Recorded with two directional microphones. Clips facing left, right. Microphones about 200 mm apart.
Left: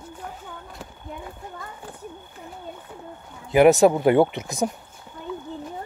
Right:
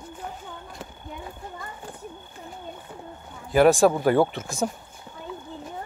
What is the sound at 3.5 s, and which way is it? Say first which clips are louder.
Speech: left 3 dB; 20° left (ahead or behind).